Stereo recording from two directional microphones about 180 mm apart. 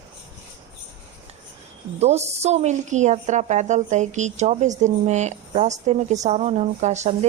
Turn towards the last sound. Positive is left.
turn(degrees=-40)  # may be behind; listen again after turning